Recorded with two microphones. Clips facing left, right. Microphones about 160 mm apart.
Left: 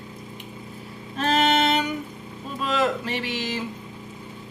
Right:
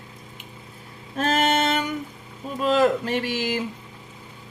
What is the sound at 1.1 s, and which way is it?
Music, 45° right (ahead or behind).